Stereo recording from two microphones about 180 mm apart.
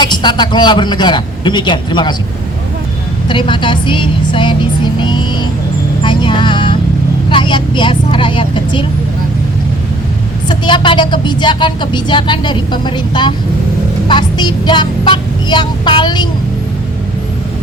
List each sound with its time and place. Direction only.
0.0 s speech: 25° left (ahead or behind)
3.2 s speech: 25° left (ahead or behind)
6.0 s vehicle: 25° left (ahead or behind)
7.3 s speech: 25° left (ahead or behind)
10.5 s speech: 25° left (ahead or behind)
14.1 s child singing: 25° left (ahead or behind)